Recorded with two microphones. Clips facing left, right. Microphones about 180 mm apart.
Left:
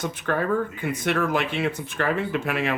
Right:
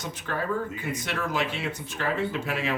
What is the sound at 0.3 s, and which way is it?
Speech, 60° left (ahead or behind).